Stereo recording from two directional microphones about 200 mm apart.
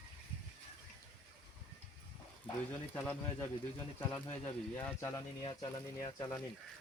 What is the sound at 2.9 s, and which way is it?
Speech, 10° left (ahead or behind).